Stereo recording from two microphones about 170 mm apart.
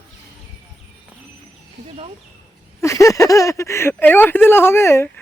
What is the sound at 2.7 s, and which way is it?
Speech, 20° left (ahead or behind).